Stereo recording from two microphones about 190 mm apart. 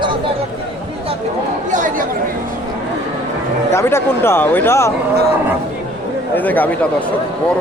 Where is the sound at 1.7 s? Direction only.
40° right (ahead or behind).